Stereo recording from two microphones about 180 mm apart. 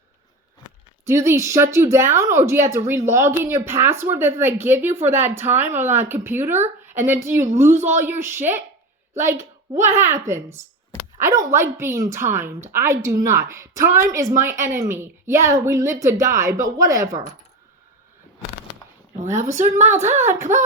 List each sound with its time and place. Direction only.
1.0 s a woman's voice: 15° right (ahead or behind)
9.8 s a woman's voice: 15° right (ahead or behind)
19.4 s a woman's voice: 15° right (ahead or behind)